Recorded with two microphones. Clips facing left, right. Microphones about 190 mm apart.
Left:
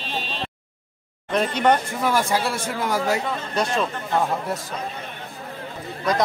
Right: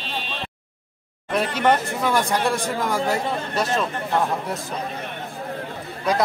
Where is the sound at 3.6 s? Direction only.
5° right (ahead or behind).